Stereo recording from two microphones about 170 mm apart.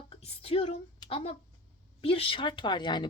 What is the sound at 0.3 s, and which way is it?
A woman's voice, 35° left (ahead or behind).